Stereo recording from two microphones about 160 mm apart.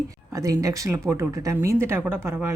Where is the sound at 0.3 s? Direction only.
20° right (ahead or behind).